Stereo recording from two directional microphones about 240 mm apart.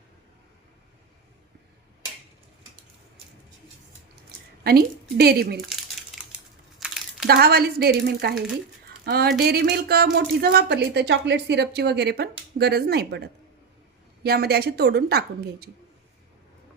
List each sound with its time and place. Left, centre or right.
4.6 s a woman's voice: right
6.7 s crumpling: centre
7.3 s a woman's voice: right
8.9 s a sound: right
9.4 s a woman's voice: right